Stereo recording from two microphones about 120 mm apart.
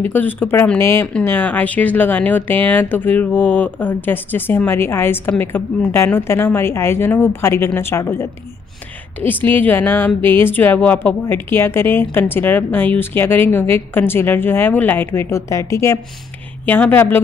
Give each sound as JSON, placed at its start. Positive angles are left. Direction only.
{"t": 0.0, "sound": "a woman's voice", "side_deg": 15}